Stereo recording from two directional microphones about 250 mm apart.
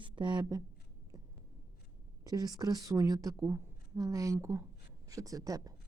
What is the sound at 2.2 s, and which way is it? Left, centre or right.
Speech, centre.